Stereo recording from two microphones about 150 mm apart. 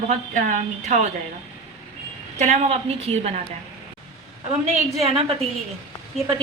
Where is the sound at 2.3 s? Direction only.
50° right (ahead or behind).